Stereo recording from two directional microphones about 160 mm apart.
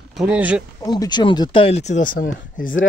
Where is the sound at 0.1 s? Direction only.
5° right (ahead or behind).